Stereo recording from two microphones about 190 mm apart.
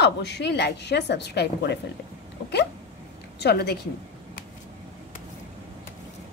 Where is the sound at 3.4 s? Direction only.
60° left (ahead or behind).